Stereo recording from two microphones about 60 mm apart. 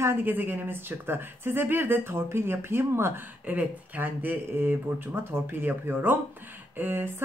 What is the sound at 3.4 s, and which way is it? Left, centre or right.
A man's voice, right.